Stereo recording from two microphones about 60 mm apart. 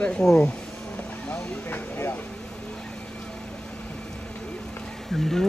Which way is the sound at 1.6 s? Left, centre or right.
Left.